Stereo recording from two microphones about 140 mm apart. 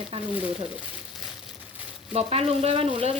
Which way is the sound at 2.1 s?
45° right (ahead or behind).